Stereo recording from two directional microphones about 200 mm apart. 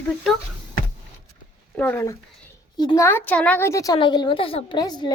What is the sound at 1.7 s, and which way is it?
A woman's voice, 10° left (ahead or behind).